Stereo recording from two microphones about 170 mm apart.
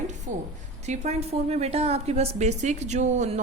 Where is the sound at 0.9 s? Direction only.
40° right (ahead or behind).